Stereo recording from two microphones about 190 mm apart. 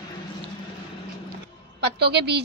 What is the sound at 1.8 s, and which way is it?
Speech, 60° right (ahead or behind).